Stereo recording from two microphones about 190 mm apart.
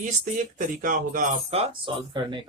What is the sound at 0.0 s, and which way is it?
Speech, 45° right (ahead or behind).